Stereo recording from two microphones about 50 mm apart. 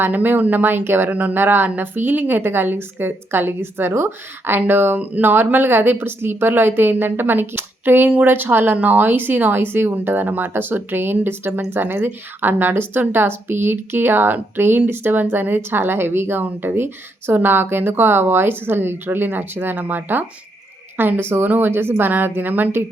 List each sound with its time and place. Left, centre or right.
0.0 s a woman's voice: right
19.7 s a woman's voice: right